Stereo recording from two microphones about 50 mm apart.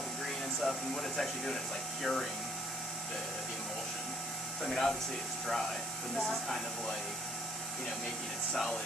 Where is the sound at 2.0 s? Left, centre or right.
Centre.